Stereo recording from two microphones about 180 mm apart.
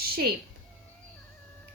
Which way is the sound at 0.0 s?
60° right (ahead or behind).